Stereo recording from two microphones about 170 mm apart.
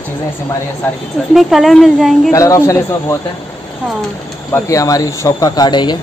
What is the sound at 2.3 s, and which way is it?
Speech, 20° left (ahead or behind).